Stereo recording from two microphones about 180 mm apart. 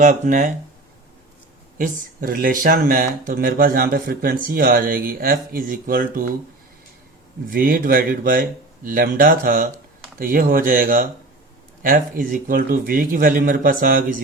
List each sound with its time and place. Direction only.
0.0 s speech: 45° right (ahead or behind)
1.8 s speech: 50° right (ahead or behind)
7.5 s speech: 50° right (ahead or behind)